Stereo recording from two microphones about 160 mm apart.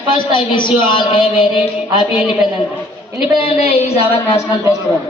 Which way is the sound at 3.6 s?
40° left (ahead or behind).